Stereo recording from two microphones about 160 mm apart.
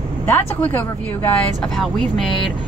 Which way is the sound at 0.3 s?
15° left (ahead or behind).